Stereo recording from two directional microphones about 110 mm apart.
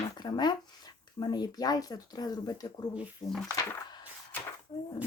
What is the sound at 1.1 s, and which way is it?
Speech, 40° left (ahead or behind).